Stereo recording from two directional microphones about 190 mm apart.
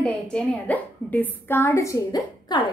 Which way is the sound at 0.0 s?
5° left (ahead or behind).